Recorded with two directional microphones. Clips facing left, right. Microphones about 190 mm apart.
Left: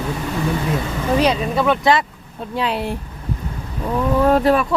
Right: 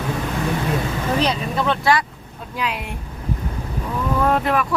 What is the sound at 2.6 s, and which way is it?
Speech, 30° left (ahead or behind).